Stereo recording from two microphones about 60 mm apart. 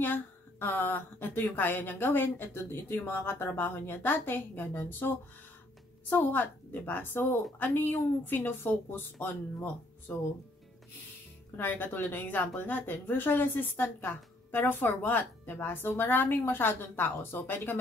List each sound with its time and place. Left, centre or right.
0.0 s speech: left
11.5 s speech: left